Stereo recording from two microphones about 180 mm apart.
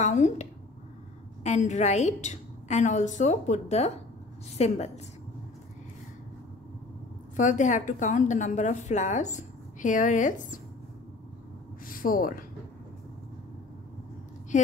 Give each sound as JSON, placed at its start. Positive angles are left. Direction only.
{"t": 0.0, "sound": "a woman's voice", "side_deg": 40}
{"t": 7.3, "sound": "a woman's voice", "side_deg": 45}
{"t": 11.8, "sound": "a sound", "side_deg": 50}